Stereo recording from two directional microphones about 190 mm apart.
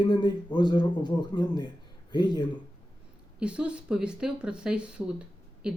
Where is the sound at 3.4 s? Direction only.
5° right (ahead or behind).